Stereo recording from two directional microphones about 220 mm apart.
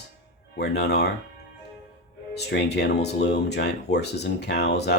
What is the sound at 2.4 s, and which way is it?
Speech, 50° left (ahead or behind).